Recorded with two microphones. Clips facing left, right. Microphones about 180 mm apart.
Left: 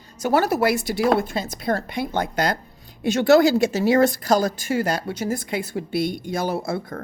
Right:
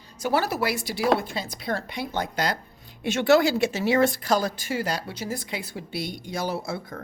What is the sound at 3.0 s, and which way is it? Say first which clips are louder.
Speech: left 4 dB; 40° left (ahead or behind).